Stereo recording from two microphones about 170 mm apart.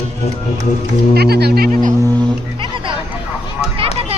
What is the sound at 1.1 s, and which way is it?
Speech, 70° right (ahead or behind).